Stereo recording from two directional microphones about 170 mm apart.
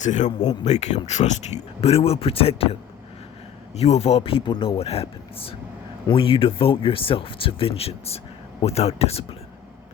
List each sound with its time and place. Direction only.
0.0 s speech: 45° left (ahead or behind)
3.8 s speech: 40° left (ahead or behind)